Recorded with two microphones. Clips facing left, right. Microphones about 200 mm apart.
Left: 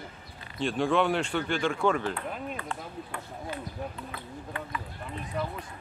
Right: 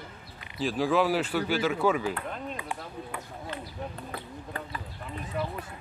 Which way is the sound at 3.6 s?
35° right (ahead or behind).